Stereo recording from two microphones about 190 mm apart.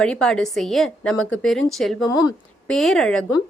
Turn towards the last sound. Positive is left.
turn(degrees=5)  # may be behind; listen again after turning